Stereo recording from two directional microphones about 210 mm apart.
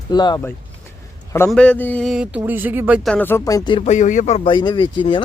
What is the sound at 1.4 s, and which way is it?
Speech, 5° left (ahead or behind).